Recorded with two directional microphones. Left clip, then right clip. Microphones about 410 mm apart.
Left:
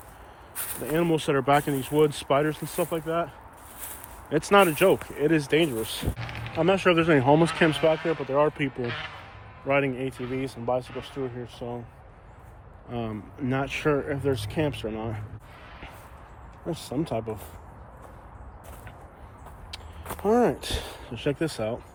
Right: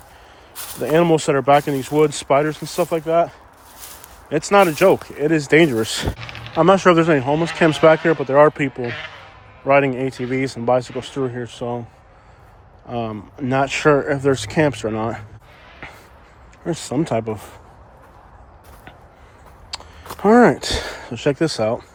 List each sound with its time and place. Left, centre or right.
0.9 s speech: centre
7.9 s speech: right
8.8 s speech: right
9.6 s speech: centre
12.9 s speech: centre
16.6 s speech: centre
19.7 s speech: centre